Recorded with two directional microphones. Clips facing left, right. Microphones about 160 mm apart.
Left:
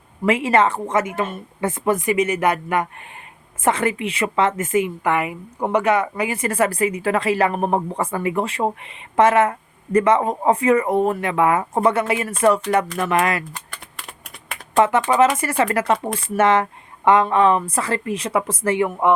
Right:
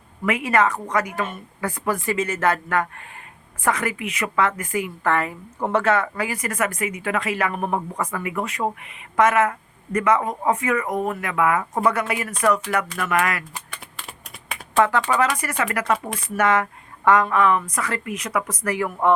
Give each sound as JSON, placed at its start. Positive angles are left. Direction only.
{"t": 0.3, "sound": "a woman's voice", "side_deg": 25}
{"t": 14.8, "sound": "a woman's voice", "side_deg": 20}